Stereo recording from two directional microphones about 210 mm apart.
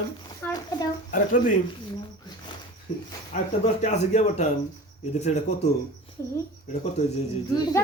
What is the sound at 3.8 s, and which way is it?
Speech, 35° left (ahead or behind).